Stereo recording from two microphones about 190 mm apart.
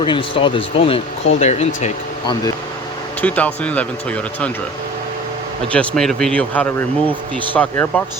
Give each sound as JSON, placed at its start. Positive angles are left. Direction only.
{"t": 0.0, "sound": "speech", "side_deg": 25}
{"t": 3.2, "sound": "speech", "side_deg": 10}
{"t": 5.7, "sound": "speech", "side_deg": 5}